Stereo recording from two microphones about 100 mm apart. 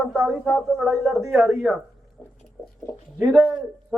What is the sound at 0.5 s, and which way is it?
Speech, 5° left (ahead or behind).